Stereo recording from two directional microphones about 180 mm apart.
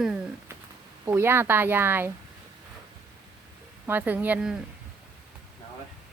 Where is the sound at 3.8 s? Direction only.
10° right (ahead or behind).